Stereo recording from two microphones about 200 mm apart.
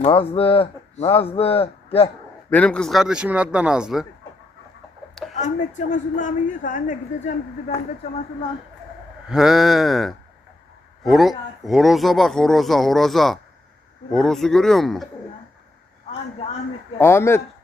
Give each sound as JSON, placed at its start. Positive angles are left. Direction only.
{"t": 0.0, "sound": "speech", "side_deg": 25}
{"t": 2.5, "sound": "speech", "side_deg": 5}
{"t": 5.3, "sound": "speech", "side_deg": 35}
{"t": 9.3, "sound": "speech", "side_deg": 0}
{"t": 17.0, "sound": "speech", "side_deg": 10}